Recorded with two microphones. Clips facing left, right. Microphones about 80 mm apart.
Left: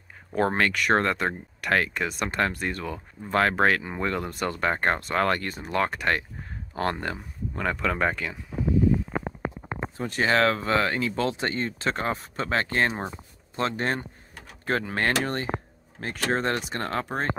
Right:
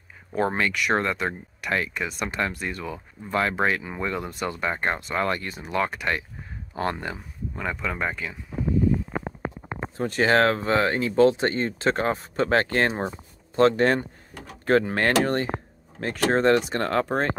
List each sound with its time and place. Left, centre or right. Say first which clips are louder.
0.3 s speech: even; left
0.6 s speech: left 1 dB; left
9.9 s speech: right 3 dB; right